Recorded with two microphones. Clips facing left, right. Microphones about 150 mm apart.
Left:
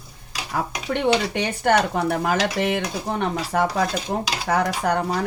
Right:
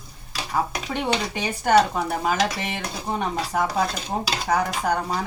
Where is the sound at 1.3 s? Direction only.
65° left (ahead or behind).